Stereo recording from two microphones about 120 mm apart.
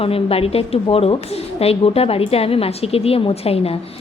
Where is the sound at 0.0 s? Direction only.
55° left (ahead or behind).